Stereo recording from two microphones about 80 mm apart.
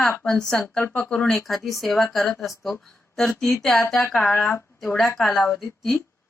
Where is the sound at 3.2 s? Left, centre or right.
Centre.